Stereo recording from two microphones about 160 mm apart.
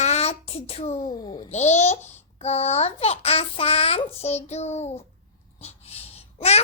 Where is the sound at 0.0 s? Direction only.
40° left (ahead or behind).